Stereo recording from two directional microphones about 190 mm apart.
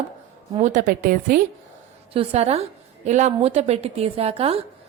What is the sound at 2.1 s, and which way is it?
Speech, 30° right (ahead or behind).